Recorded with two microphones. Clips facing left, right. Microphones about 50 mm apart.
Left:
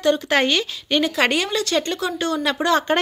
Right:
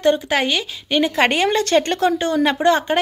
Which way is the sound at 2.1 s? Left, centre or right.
Right.